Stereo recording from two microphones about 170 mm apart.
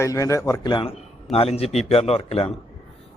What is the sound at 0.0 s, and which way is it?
A man's voice, 20° left (ahead or behind).